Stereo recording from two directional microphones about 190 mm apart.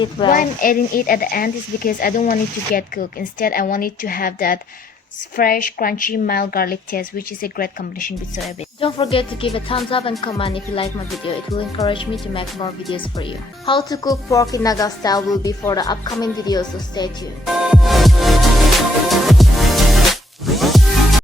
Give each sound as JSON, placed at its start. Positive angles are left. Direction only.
{"t": 0.3, "sound": "speech", "side_deg": 45}
{"t": 8.8, "sound": "a woman's voice", "side_deg": 30}
{"t": 17.4, "sound": "music", "side_deg": 0}